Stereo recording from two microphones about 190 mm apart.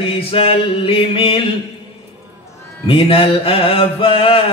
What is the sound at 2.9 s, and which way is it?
A man's voice, 30° left (ahead or behind).